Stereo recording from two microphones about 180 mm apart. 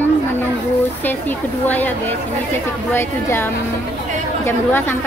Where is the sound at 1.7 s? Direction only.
10° left (ahead or behind).